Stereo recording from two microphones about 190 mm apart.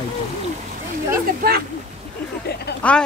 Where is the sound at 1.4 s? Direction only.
55° right (ahead or behind).